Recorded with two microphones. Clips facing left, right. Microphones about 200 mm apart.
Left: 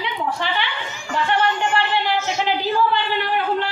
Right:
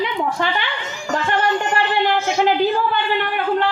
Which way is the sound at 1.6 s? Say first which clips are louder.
Right 2 dB; 50° right (ahead or behind).